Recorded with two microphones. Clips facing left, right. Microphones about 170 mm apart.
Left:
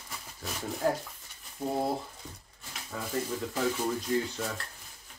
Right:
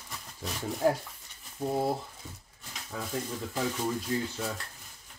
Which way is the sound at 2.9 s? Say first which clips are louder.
Even; centre (ahead or behind).